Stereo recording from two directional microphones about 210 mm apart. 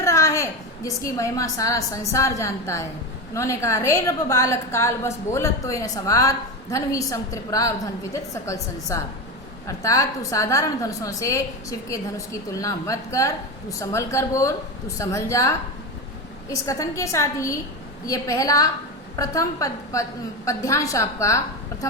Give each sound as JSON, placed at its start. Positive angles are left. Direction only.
{"t": 0.0, "sound": "a woman's voice", "side_deg": 15}
{"t": 16.6, "sound": "a woman's voice", "side_deg": 15}